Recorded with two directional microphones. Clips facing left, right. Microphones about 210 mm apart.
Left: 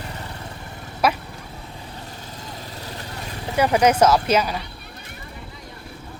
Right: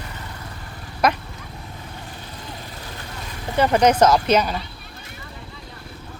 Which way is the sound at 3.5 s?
10° left (ahead or behind).